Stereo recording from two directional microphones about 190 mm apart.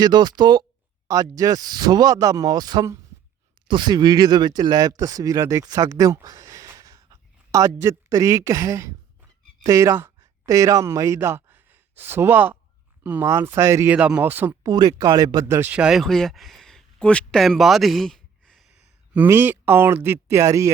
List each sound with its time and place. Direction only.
0.0 s speech: 20° right (ahead or behind)